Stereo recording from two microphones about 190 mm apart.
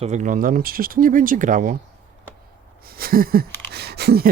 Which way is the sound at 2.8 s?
50° right (ahead or behind).